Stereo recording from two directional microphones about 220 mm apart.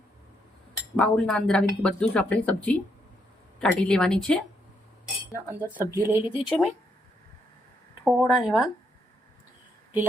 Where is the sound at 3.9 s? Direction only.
5° left (ahead or behind).